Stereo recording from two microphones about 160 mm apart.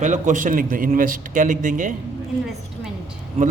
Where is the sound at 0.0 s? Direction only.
50° right (ahead or behind).